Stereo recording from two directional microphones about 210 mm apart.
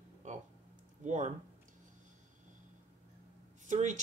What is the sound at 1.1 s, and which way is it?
Speech, 35° right (ahead or behind).